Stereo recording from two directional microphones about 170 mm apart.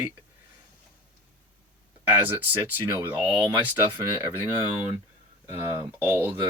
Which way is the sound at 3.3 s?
30° right (ahead or behind).